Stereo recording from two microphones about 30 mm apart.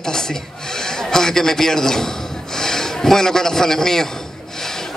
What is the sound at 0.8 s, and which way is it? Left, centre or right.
A man's voice, centre.